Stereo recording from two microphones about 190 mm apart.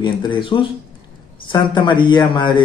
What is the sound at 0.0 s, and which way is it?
Speech, 25° left (ahead or behind).